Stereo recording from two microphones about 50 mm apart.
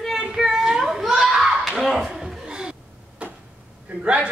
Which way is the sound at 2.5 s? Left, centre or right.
Centre.